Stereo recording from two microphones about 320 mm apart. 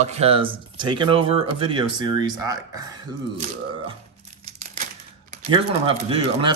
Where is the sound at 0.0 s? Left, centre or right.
Centre.